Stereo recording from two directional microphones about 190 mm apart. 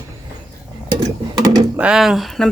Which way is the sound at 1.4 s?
20° right (ahead or behind).